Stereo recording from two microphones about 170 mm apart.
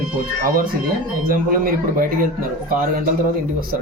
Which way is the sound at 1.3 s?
55° right (ahead or behind).